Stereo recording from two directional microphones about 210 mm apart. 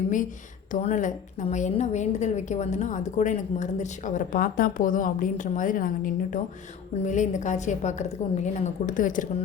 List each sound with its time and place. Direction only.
0.7 s a woman's voice: 35° left (ahead or behind)